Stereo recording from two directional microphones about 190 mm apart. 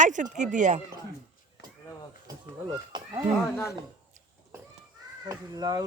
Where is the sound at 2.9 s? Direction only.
25° right (ahead or behind).